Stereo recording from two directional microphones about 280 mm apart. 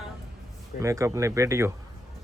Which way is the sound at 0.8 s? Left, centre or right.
Centre.